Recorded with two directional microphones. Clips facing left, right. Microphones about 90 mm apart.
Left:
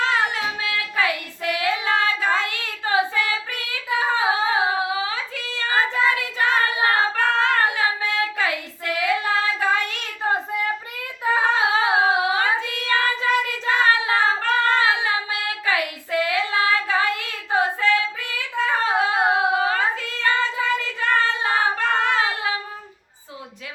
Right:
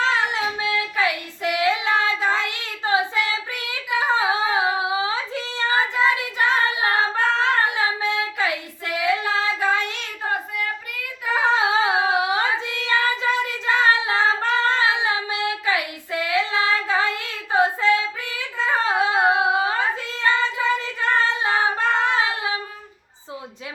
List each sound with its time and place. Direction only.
0.0 s child singing: 20° right (ahead or behind)
3.9 s a sound: 20° right (ahead or behind)
6.4 s child singing: 20° right (ahead or behind)
6.9 s singing: 20° right (ahead or behind)
7.8 s child singing: 20° right (ahead or behind)
10.0 s child singing: 25° left (ahead or behind)
11.4 s child singing: 25° right (ahead or behind)